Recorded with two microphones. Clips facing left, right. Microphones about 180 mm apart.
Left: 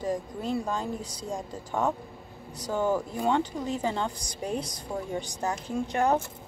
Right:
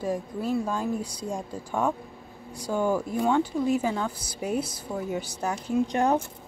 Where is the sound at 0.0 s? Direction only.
10° right (ahead or behind).